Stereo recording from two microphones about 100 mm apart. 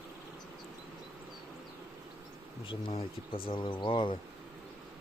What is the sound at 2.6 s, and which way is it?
Speech, 70° left (ahead or behind).